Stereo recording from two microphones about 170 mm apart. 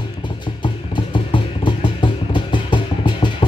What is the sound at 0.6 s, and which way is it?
Music, 30° left (ahead or behind).